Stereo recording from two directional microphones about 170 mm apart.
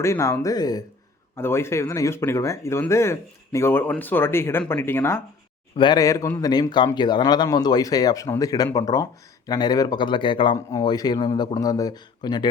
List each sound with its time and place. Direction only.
0.0 s speech: 15° left (ahead or behind)
5.7 s speech: 25° left (ahead or behind)